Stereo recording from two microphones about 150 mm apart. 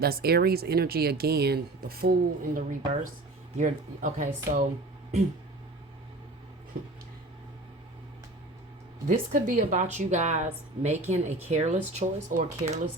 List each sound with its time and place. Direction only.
0.0 s speech: 90° right; by 4.3 s 60° right (ahead or behind)
6.8 s a sound: 75° right (ahead or behind)
9.0 s speech: 60° right (ahead or behind)